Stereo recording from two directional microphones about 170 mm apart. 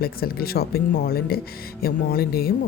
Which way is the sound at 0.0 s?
65° left (ahead or behind).